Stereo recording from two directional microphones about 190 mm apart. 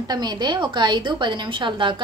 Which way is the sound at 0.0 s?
20° right (ahead or behind).